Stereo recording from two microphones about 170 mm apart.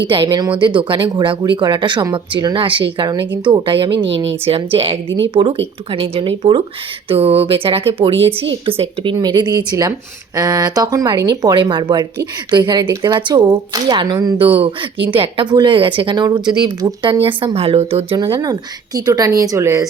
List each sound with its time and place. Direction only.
0.1 s speech: 30° right (ahead or behind)
3.9 s speech: 90° right
4.4 s speech: 35° right (ahead or behind); by 19.9 s 15° right (ahead or behind)